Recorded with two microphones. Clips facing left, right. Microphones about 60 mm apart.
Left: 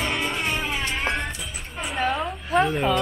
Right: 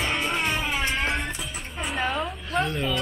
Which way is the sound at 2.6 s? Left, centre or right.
Centre.